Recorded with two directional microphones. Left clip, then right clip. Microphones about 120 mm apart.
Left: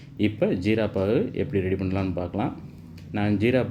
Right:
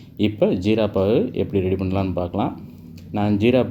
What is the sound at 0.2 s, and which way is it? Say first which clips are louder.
Speech: right 5 dB; 30° right (ahead or behind).